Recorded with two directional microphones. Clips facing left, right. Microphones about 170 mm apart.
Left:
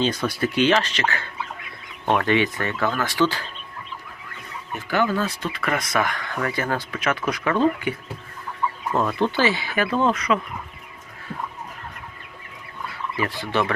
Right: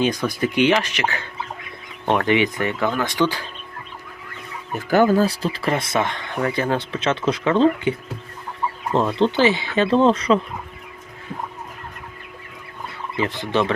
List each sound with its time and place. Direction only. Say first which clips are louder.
0.0 s speech: right 2 dB; 15° right (ahead or behind)
4.7 s speech: right 6 dB; 45° right (ahead or behind)
13.1 s speech: right 3 dB; 20° right (ahead or behind)